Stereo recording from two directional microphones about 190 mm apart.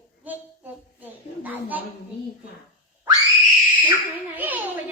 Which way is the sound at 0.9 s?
10° right (ahead or behind).